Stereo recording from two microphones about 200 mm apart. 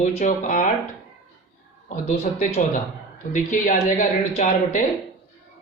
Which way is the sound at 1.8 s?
40° left (ahead or behind).